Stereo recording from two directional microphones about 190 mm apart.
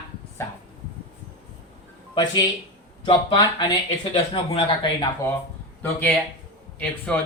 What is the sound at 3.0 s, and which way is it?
Speech, 20° left (ahead or behind).